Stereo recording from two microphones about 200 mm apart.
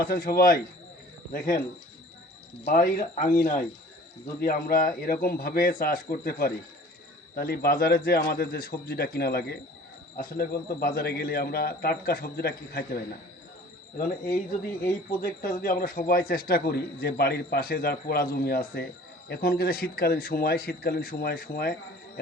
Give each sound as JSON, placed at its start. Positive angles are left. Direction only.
{"t": 0.0, "sound": "a man's voice", "side_deg": 50}
{"t": 2.6, "sound": "a man's voice", "side_deg": 45}
{"t": 15.2, "sound": "a man's voice", "side_deg": 45}